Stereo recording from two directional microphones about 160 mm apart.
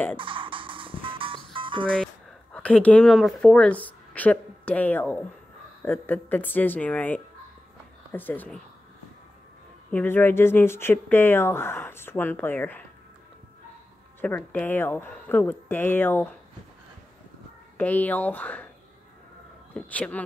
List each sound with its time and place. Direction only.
0.2 s music: 30° right (ahead or behind)
2.5 s speech: 10° left (ahead or behind)
9.8 s speech: 10° left (ahead or behind)
14.2 s speech: 10° left (ahead or behind)
17.7 s speech: 10° left (ahead or behind)
19.7 s speech: 10° left (ahead or behind)